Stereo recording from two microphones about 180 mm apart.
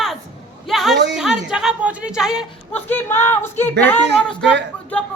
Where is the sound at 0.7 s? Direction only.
Centre (ahead or behind).